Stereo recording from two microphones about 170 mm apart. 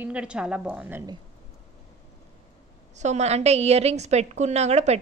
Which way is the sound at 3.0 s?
40° right (ahead or behind).